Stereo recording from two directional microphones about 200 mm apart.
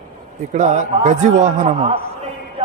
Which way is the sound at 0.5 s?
35° right (ahead or behind).